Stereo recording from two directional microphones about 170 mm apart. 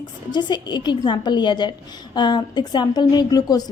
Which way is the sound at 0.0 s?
25° left (ahead or behind).